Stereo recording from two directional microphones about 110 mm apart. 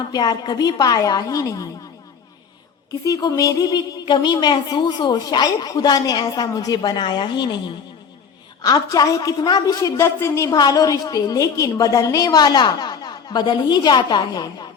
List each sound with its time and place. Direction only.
0.1 s speech: 40° left (ahead or behind)
3.0 s speech: 35° left (ahead or behind)
8.6 s speech: 35° left (ahead or behind)